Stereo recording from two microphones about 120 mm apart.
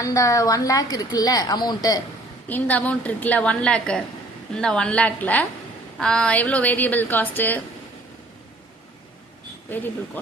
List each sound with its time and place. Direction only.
0.0 s a woman's voice: 25° left (ahead or behind)
2.5 s a woman's voice: 15° left (ahead or behind)
9.6 s speech: 15° left (ahead or behind)